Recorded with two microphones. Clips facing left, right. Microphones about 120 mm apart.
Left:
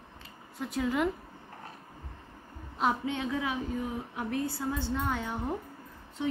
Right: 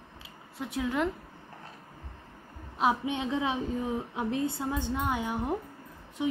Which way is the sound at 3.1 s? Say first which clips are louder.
Right 2 dB; 20° right (ahead or behind).